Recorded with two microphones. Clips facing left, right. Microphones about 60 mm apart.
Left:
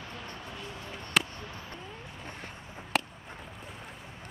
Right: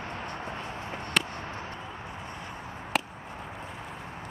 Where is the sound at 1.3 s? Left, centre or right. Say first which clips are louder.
Right 6 dB; right.